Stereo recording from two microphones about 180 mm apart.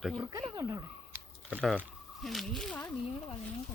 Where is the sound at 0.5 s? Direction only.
15° right (ahead or behind).